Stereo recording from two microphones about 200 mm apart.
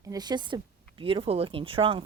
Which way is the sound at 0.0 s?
20° right (ahead or behind).